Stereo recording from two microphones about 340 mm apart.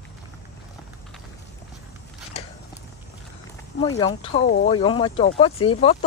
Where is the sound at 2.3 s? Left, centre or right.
Centre.